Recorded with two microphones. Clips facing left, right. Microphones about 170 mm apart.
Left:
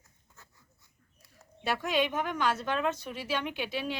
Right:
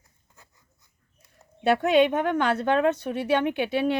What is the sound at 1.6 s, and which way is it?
A woman's voice, 60° right (ahead or behind).